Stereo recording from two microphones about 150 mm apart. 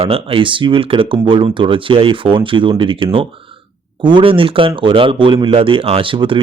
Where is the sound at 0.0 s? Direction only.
40° right (ahead or behind).